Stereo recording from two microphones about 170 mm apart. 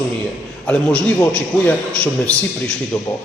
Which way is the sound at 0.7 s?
5° left (ahead or behind).